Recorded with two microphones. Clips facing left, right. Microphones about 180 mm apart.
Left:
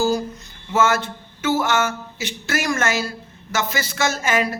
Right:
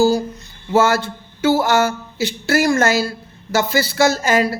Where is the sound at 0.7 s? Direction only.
35° right (ahead or behind).